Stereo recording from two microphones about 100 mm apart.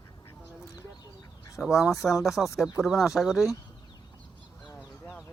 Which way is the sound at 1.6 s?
5° right (ahead or behind).